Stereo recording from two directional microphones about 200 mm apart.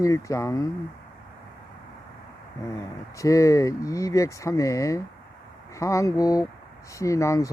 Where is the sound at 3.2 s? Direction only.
15° left (ahead or behind).